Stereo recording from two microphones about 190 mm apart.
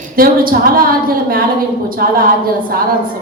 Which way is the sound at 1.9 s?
50° right (ahead or behind).